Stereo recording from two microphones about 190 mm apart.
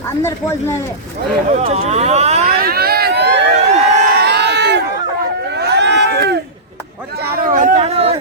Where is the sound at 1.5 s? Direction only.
35° right (ahead or behind).